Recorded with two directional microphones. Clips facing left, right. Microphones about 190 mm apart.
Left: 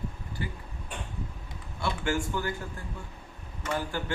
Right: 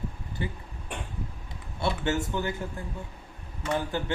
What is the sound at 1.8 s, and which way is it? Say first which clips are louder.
Speech: right 2 dB; 20° right (ahead or behind).